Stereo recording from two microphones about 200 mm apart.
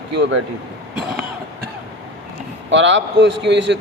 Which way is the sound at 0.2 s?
65° right (ahead or behind).